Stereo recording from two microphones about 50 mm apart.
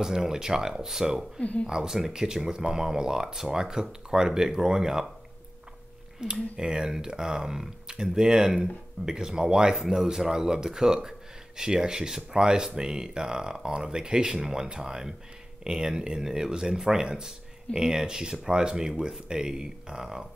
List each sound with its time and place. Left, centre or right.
0.0 s speech: centre
1.4 s speech: left
1.7 s speech: centre
6.2 s speech: centre